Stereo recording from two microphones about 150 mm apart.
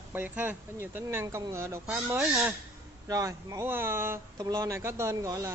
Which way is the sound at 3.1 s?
20° right (ahead or behind).